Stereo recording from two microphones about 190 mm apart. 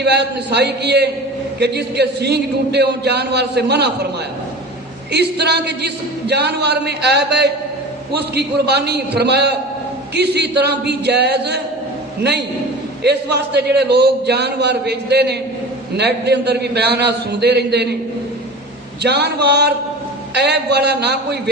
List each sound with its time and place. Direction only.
0.0 s a man's voice: 60° right (ahead or behind)
5.1 s a man's voice: 60° right (ahead or behind)
13.0 s a man's voice: 60° right (ahead or behind)
19.0 s a man's voice: 60° right (ahead or behind)